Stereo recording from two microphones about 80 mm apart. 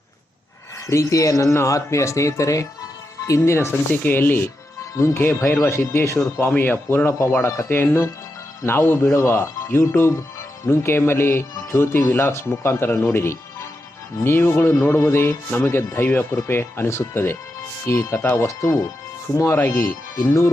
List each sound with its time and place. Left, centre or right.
0.9 s speech: left
6.6 s speech: left